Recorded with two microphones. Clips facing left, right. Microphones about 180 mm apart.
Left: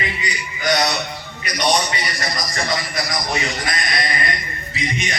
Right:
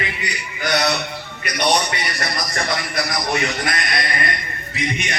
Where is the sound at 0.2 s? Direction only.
60° right (ahead or behind).